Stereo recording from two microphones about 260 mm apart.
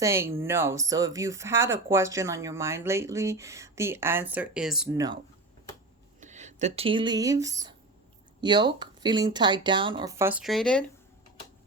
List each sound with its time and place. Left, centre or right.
0.0 s speech: centre
6.1 s speech: right; by 10.8 s centre